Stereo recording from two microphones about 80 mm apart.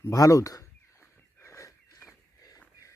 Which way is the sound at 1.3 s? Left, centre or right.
Left.